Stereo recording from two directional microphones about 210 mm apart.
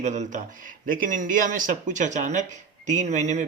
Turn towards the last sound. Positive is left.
turn(degrees=-35)  # may be behind; listen again after turning